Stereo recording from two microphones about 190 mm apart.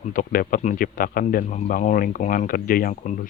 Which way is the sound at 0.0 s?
45° left (ahead or behind).